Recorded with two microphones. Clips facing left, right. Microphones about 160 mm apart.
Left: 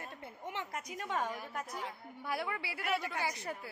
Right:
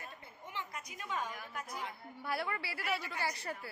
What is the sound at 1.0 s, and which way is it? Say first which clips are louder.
Speech: left 3 dB; 60° left (ahead or behind).